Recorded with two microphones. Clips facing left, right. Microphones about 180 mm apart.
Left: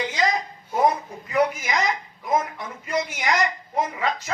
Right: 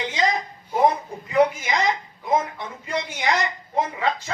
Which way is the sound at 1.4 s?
30° right (ahead or behind).